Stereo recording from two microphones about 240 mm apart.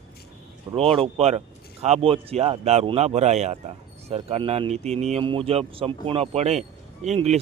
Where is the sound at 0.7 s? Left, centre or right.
Right.